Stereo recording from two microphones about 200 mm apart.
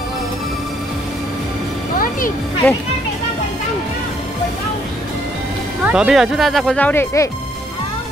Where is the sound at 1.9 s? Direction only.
45° left (ahead or behind).